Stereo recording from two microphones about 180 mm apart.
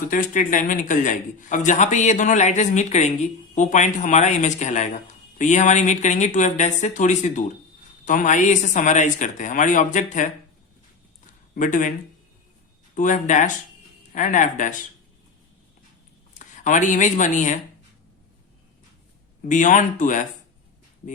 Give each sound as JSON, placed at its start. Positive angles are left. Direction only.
{"t": 0.1, "sound": "a man's voice", "side_deg": 45}
{"t": 11.5, "sound": "a man's voice", "side_deg": 45}
{"t": 12.9, "sound": "a man's voice", "side_deg": 45}
{"t": 16.4, "sound": "speech", "side_deg": 45}
{"t": 19.5, "sound": "a man's voice", "side_deg": 45}